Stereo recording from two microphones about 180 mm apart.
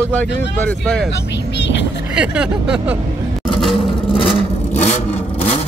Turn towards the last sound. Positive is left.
turn(degrees=40)  # may be behind; listen again after turning